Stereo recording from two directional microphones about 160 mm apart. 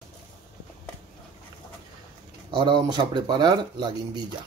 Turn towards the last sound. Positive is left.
turn(degrees=-30)  # may be behind; listen again after turning